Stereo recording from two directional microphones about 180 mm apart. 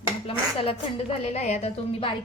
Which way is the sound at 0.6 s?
30° left (ahead or behind).